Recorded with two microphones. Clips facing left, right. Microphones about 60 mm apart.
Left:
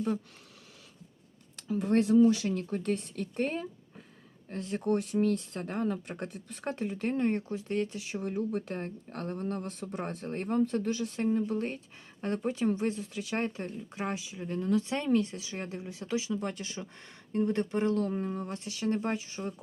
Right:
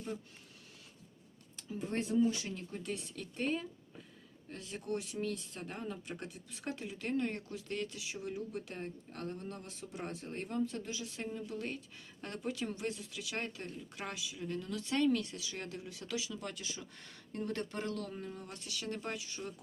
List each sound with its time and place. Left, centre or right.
1.6 s speech: left
8.0 s speech: left